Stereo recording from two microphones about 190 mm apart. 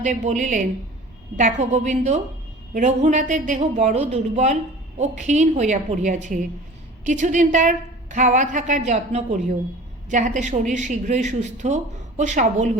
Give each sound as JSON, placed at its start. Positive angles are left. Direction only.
{"t": 0.0, "sound": "speech", "side_deg": -40}